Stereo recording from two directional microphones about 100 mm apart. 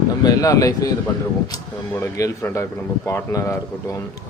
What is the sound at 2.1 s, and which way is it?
Speech, 35° left (ahead or behind).